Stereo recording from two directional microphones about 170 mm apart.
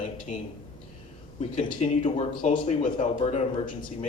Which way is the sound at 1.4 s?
30° left (ahead or behind).